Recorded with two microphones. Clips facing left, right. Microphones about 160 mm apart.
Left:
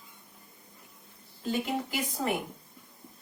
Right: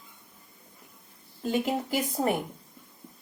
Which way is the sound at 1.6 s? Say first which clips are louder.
Right 4 dB; 40° right (ahead or behind).